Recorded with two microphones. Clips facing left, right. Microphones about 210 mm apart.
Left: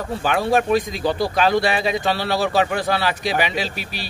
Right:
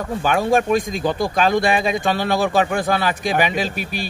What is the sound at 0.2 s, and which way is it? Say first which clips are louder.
Speech: right 1 dB; 45° right (ahead or behind).